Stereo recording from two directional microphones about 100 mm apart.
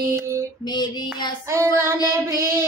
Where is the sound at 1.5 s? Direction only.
25° right (ahead or behind).